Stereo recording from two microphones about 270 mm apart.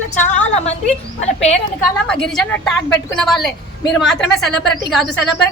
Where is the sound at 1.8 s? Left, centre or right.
Centre.